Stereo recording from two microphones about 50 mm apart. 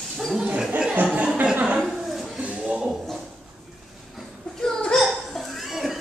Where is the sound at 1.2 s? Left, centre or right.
Right.